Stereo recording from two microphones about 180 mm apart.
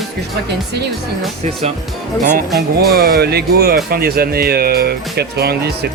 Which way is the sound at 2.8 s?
55° right (ahead or behind).